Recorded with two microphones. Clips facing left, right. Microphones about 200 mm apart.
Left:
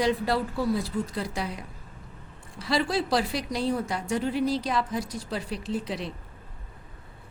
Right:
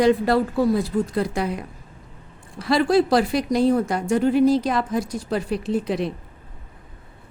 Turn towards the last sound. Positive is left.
turn(degrees=-55)  # may be behind; listen again after turning